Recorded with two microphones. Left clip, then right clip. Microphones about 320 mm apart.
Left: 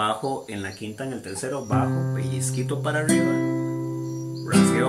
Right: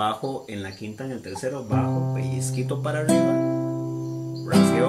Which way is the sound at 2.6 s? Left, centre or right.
Centre.